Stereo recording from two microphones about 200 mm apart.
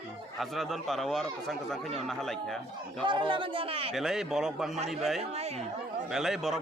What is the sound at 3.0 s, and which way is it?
Speech, 25° right (ahead or behind).